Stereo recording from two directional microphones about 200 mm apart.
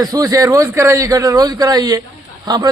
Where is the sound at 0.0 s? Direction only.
20° right (ahead or behind).